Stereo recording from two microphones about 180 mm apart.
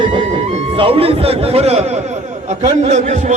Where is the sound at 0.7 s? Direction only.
30° right (ahead or behind).